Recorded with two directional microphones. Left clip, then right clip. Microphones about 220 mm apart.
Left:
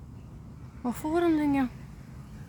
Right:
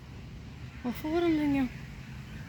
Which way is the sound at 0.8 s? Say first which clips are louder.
Left 3 dB; 15° left (ahead or behind).